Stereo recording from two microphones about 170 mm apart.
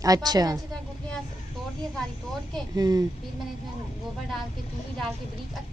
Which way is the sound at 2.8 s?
20° right (ahead or behind).